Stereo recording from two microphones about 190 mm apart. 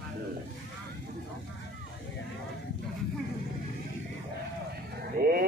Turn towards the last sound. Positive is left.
turn(degrees=-55)  # may be behind; listen again after turning